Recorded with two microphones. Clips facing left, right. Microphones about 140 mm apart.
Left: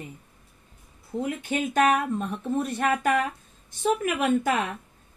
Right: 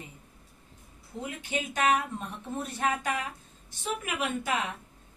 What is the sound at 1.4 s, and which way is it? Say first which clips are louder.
Speech: left 6 dB; 50° left (ahead or behind).